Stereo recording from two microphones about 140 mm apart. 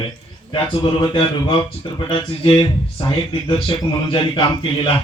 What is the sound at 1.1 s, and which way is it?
Speech, 35° left (ahead or behind).